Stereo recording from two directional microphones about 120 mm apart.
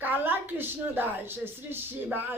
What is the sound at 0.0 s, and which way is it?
A woman's voice, 15° right (ahead or behind).